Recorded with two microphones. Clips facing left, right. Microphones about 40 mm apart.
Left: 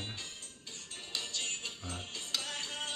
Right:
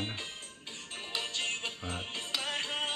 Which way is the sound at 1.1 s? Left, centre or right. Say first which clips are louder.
Right 4 dB; right.